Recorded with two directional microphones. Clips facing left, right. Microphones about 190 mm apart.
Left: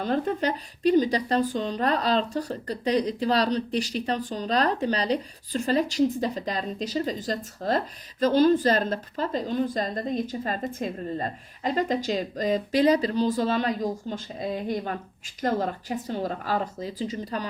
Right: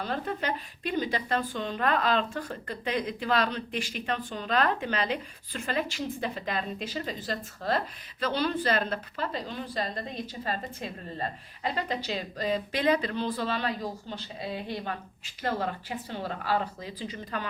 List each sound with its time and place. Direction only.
0.0 s a woman's voice: 45° left (ahead or behind)